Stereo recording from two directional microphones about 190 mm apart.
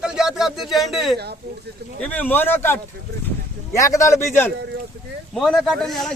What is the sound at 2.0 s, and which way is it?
Speech, 10° left (ahead or behind).